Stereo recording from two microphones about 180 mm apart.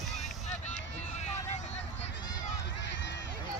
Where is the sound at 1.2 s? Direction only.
40° left (ahead or behind).